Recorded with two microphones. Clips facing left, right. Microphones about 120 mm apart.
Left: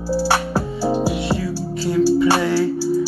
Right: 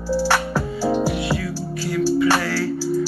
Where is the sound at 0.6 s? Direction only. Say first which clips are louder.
Left 1 dB; 15° left (ahead or behind).